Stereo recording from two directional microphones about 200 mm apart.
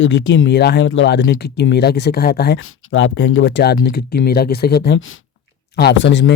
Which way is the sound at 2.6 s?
70° left (ahead or behind).